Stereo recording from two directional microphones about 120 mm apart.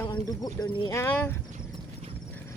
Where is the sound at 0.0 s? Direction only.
35° left (ahead or behind).